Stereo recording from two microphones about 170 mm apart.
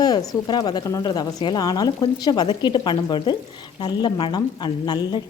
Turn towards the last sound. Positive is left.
turn(degrees=25)  # may be behind; listen again after turning